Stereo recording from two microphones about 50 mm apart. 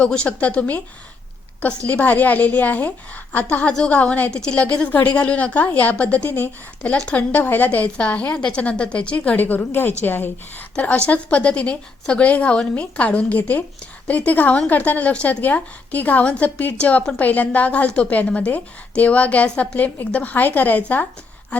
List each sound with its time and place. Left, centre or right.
0.0 s a woman's voice: left
1.9 s a woman's voice: left
4.3 s a woman's voice: centre
7.2 s a woman's voice: left
7.9 s a woman's voice: left
10.8 s a woman's voice: left
16.2 s a woman's voice: left